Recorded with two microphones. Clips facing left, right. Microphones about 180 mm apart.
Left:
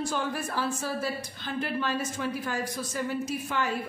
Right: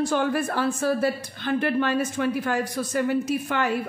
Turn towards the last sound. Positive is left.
turn(degrees=-65)  # may be behind; listen again after turning